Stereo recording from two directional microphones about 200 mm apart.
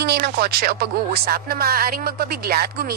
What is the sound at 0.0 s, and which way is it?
Speech, 50° right (ahead or behind).